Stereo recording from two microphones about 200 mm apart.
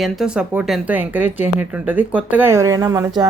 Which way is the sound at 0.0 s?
5° right (ahead or behind).